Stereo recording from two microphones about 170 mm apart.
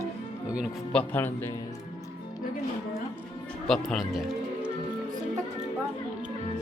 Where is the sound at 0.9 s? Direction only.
10° left (ahead or behind).